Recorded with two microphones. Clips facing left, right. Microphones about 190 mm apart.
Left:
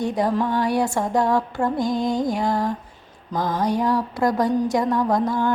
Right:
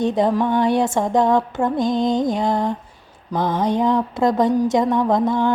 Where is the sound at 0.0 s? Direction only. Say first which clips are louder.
Right 4 dB; 25° right (ahead or behind).